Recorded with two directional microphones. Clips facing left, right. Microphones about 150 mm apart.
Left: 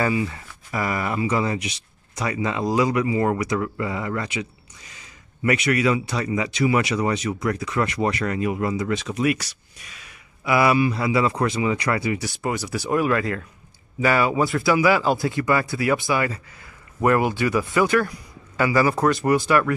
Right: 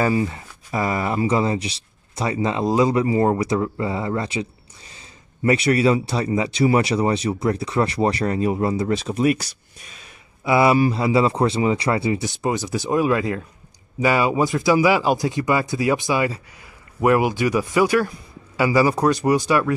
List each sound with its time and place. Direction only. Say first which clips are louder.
0.3 s speech: right 3 dB; 25° right (ahead or behind)
10.4 s speech: right 2 dB; 25° right (ahead or behind)